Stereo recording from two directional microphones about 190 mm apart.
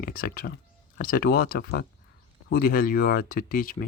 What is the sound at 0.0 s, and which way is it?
Speech, 50° left (ahead or behind).